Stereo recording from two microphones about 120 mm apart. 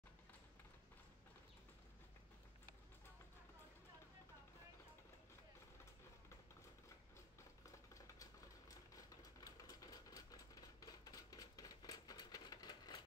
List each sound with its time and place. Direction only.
7.6 s typing: 30° left (ahead or behind)